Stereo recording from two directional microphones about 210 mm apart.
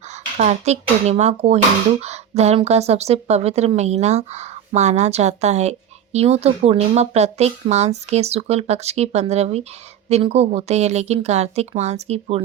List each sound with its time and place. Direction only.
0.3 s a woman's voice: 35° right (ahead or behind)